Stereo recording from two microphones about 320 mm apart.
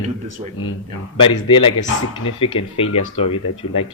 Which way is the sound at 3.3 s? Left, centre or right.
Left.